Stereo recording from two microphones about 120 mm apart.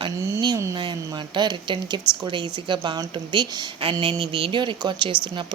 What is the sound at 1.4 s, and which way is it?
A woman's voice, 40° right (ahead or behind).